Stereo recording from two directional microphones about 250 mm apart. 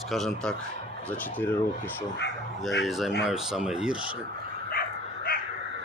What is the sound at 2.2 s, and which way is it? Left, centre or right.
Dog, left.